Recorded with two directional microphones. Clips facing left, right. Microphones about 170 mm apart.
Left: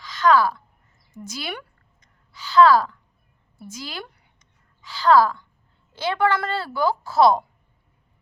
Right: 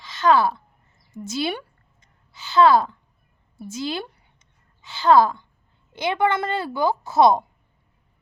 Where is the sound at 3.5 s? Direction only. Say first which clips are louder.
Right 7 dB; 25° right (ahead or behind).